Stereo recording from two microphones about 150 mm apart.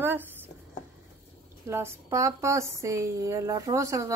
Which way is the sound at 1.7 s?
20° right (ahead or behind).